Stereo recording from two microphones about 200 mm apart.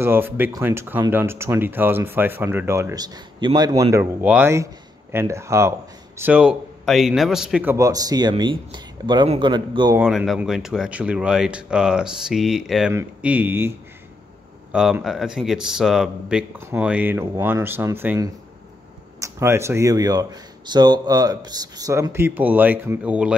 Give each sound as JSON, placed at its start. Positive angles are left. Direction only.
{"t": 0.0, "sound": "speech", "side_deg": -10}
{"t": 9.9, "sound": "speech", "side_deg": -5}